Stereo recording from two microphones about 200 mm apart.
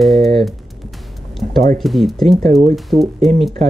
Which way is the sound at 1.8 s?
Centre (ahead or behind).